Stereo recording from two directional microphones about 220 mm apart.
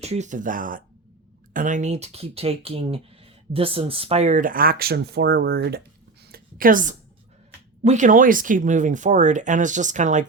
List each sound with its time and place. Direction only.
0.0 s speech: 30° right (ahead or behind); by 5.8 s 45° right (ahead or behind)
6.2 s a sound: 40° right (ahead or behind)
7.9 s speech: 35° right (ahead or behind)